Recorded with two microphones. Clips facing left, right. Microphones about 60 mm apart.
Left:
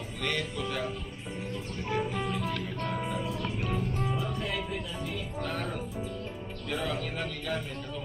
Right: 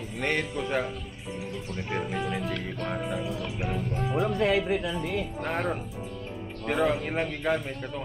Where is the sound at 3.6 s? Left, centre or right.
Centre.